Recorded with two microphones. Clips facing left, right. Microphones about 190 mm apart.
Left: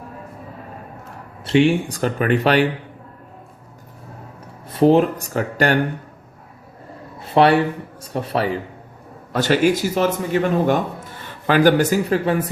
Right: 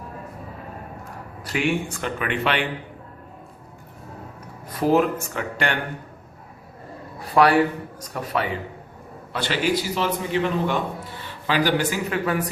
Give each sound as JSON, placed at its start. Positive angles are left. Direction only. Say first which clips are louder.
{"t": 1.5, "sound": "speech", "louder": "left 8 dB", "side_deg": 30}
{"t": 4.7, "sound": "speech", "louder": "left 5 dB", "side_deg": 30}
{"t": 7.2, "sound": "a sound", "louder": "left 3 dB", "side_deg": 30}
{"t": 8.1, "sound": "speech", "louder": "left 4 dB", "side_deg": 30}
{"t": 9.3, "sound": "a man's voice", "louder": "left 7 dB", "side_deg": 45}